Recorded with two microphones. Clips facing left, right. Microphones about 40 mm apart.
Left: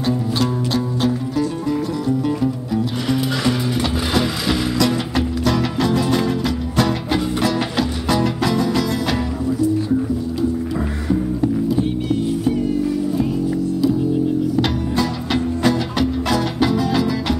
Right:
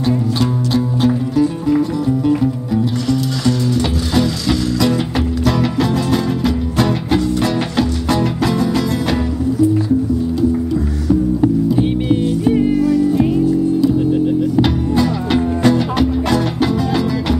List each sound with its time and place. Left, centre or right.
0.0 s music: centre
3.1 s music: left
4.7 s music: centre
12.5 s music: right
14.5 s music: centre